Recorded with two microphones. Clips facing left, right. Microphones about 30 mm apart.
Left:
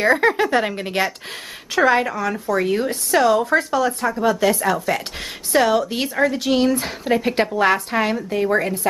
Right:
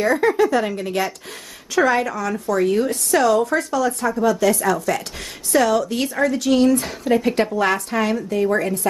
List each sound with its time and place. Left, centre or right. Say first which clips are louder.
0.0 s speech: even; left
1.8 s a woman's voice: left 1 dB; left